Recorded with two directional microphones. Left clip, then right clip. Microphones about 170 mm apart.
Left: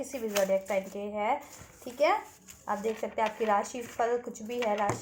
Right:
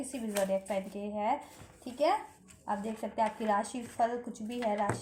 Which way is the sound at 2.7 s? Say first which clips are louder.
Left 4 dB; 30° left (ahead or behind).